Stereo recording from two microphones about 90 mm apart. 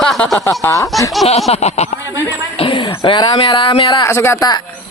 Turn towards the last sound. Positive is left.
turn(degrees=30)  # may be behind; listen again after turning